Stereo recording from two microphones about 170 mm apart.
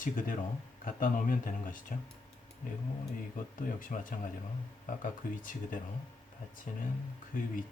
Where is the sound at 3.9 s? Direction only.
50° left (ahead or behind).